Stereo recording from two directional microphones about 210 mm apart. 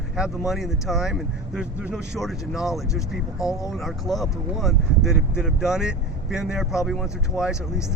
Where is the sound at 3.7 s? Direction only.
Centre (ahead or behind).